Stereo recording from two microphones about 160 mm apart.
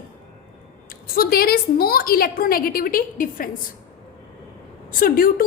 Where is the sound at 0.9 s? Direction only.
70° left (ahead or behind).